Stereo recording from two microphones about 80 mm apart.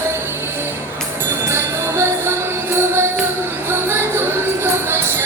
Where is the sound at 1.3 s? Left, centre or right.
Right.